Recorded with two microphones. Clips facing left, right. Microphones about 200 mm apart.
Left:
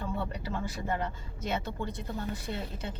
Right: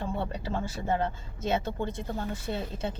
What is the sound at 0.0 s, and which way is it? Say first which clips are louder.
Speech: right 2 dB; 25° right (ahead or behind).